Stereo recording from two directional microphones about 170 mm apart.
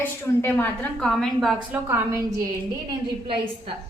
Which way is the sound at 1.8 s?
15° right (ahead or behind).